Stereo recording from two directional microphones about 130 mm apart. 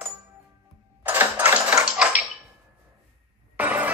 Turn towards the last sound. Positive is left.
turn(degrees=-15)  # may be behind; listen again after turning